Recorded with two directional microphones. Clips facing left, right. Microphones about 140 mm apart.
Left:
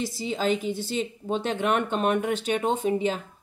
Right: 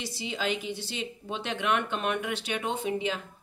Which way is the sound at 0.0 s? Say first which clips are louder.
Left 6 dB; 40° left (ahead or behind).